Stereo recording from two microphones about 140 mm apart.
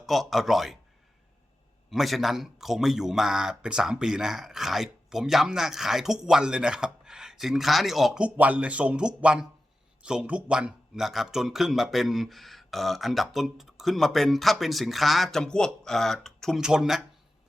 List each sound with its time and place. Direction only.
0.0 s a man's voice: centre (ahead or behind)
1.9 s a man's voice: centre (ahead or behind)